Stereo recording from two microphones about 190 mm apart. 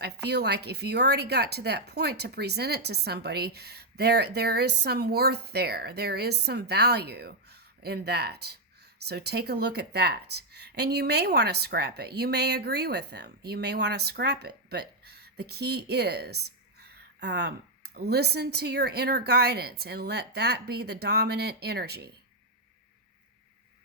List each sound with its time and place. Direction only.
0.0 s a woman's voice: 60° right (ahead or behind)